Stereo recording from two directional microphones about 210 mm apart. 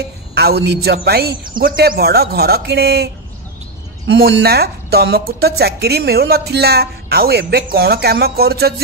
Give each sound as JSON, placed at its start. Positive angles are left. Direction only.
{"t": 0.3, "sound": "speech", "side_deg": -50}
{"t": 4.1, "sound": "speech", "side_deg": -50}